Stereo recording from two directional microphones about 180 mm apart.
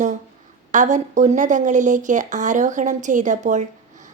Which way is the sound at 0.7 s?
45° right (ahead or behind).